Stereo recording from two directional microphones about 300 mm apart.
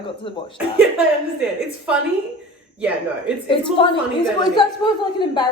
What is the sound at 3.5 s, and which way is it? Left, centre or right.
A woman's voice, centre.